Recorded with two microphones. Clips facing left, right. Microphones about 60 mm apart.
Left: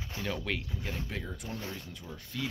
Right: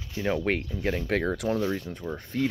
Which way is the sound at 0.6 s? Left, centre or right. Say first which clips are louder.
Right 9 dB; right.